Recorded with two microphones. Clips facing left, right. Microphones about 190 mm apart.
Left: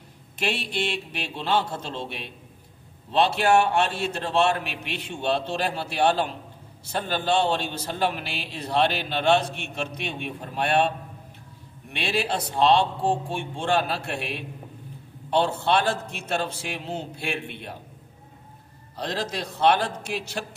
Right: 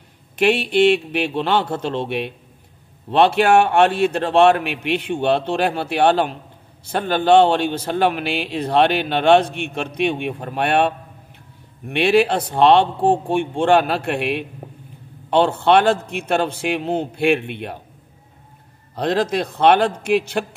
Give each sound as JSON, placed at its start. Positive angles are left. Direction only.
{"t": 0.4, "sound": "a man's voice", "side_deg": -60}
{"t": 11.9, "sound": "a man's voice", "side_deg": -60}
{"t": 18.9, "sound": "a man's voice", "side_deg": -60}